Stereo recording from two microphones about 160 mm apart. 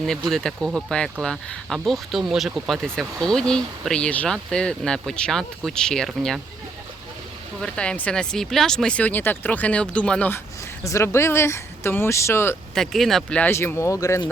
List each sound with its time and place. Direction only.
0.0 s speech: centre (ahead or behind)
7.6 s speech: 5° left (ahead or behind)
12.7 s speech: centre (ahead or behind); by 14.3 s 20° left (ahead or behind)